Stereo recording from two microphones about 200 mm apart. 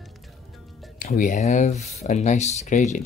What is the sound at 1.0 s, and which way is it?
Speech, 40° left (ahead or behind).